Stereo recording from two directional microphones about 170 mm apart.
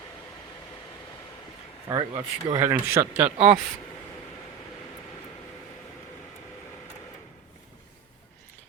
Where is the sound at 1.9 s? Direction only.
20° right (ahead or behind).